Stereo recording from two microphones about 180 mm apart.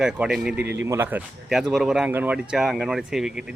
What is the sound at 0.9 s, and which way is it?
Speech, 10° right (ahead or behind).